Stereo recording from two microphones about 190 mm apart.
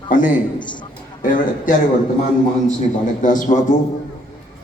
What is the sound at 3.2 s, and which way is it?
Speech, 40° left (ahead or behind).